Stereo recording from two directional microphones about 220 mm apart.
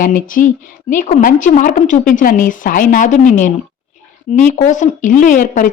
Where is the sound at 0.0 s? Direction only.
35° left (ahead or behind).